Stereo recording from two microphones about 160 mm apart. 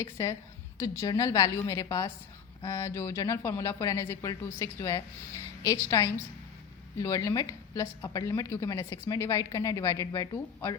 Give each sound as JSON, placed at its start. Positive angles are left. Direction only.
{"t": 0.0, "sound": "a woman's voice", "side_deg": 20}